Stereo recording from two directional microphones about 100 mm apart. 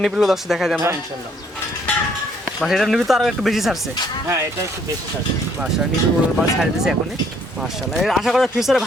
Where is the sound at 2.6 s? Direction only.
Centre (ahead or behind).